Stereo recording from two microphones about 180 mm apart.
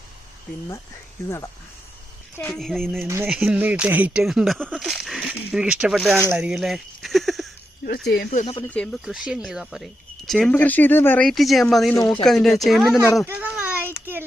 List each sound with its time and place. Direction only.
2.4 s speech: 5° left (ahead or behind)
8.1 s speech: 55° left (ahead or behind)
8.7 s speech: 5° left (ahead or behind)
13.2 s children playing: 10° right (ahead or behind)
13.9 s child singing: 10° right (ahead or behind)